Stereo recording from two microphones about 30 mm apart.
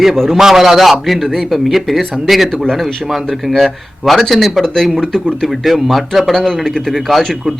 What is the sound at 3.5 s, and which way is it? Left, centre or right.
A man's voice, centre.